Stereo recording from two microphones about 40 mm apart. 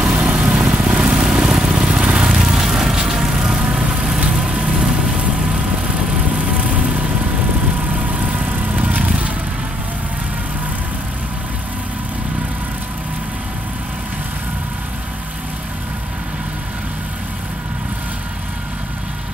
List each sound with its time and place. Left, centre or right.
0.2 s vehicle: right